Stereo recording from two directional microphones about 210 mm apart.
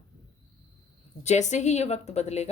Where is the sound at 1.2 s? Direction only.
35° left (ahead or behind).